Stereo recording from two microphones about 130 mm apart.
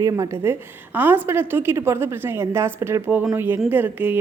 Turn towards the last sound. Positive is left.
turn(degrees=-15)  # may be behind; listen again after turning